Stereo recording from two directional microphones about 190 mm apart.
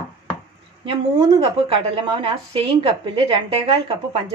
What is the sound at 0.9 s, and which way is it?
A woman's voice, 25° right (ahead or behind).